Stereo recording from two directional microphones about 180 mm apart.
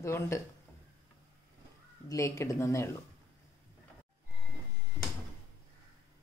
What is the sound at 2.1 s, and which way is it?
Speech, 15° left (ahead or behind).